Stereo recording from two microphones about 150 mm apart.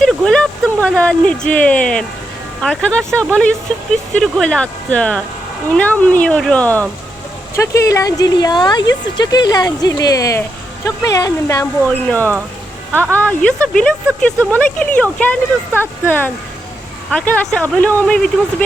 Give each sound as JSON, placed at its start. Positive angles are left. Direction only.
{"t": 0.0, "sound": "a sound", "side_deg": 5}
{"t": 1.5, "sound": "speech", "side_deg": 10}
{"t": 7.5, "sound": "speech", "side_deg": 20}
{"t": 12.9, "sound": "speech", "side_deg": -15}
{"t": 13.1, "sound": "speech", "side_deg": 10}